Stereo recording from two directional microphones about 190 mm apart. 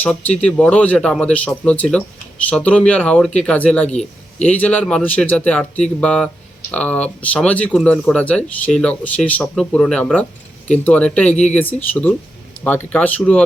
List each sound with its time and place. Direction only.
0.0 s speech: 5° left (ahead or behind)
3.8 s a man's voice: 35° left (ahead or behind)
4.4 s speech: 10° left (ahead or behind)